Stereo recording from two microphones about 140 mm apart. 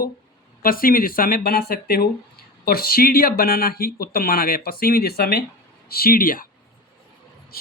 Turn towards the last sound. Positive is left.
turn(degrees=90)